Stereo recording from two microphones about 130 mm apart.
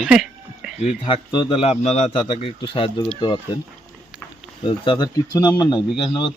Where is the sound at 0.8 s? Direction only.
40° left (ahead or behind).